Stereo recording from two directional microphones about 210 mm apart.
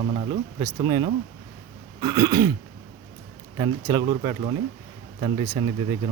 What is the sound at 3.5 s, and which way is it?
Speech, 20° right (ahead or behind).